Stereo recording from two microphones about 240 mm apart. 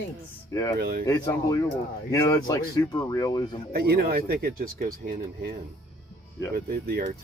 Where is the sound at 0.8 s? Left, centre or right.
Right.